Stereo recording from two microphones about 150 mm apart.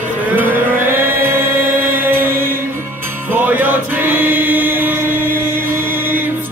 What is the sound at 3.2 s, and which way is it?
Music, 15° right (ahead or behind).